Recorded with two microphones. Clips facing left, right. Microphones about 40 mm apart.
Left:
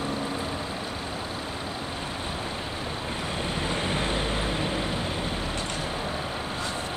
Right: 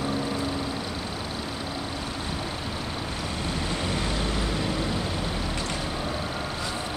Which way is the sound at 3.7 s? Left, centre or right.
Left.